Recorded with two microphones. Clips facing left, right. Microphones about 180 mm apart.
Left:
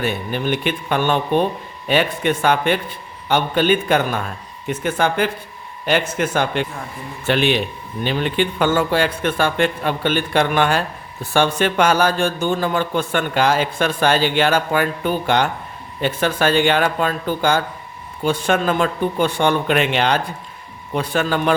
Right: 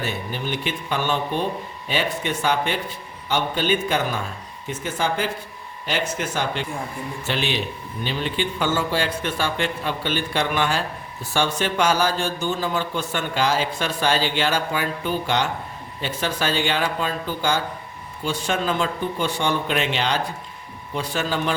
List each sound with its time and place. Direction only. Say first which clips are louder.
0.0 s a man's voice: left 6 dB; 60° left (ahead or behind)